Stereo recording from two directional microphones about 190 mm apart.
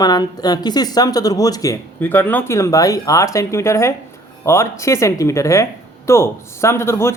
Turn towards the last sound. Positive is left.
turn(degrees=15)  # may be behind; listen again after turning